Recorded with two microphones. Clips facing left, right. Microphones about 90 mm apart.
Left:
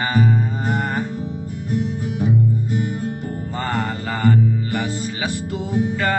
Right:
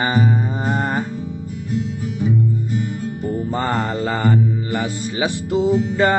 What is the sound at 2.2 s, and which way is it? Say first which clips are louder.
Music: even; 50° left (ahead or behind).